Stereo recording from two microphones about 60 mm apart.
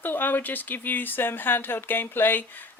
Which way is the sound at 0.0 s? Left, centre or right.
Left.